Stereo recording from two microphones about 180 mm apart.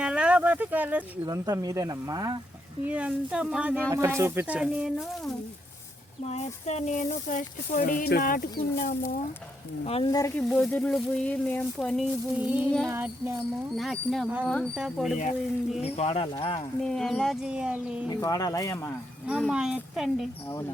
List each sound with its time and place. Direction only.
0.0 s speech: 5° right (ahead or behind)
2.8 s speech: 10° right (ahead or behind)
6.2 s speech: 40° left (ahead or behind)
9.8 s speech: 30° left (ahead or behind)
10.3 s speech: 5° left (ahead or behind); by 13.3 s 15° right (ahead or behind)
13.7 s speech: centre (ahead or behind)
15.8 s speech: 35° left (ahead or behind)
16.8 s speech: 5° left (ahead or behind)
18.1 s speech: 20° left (ahead or behind)
19.3 s speech: 5° right (ahead or behind)